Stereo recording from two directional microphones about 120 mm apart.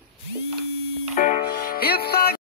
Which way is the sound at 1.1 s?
90° left.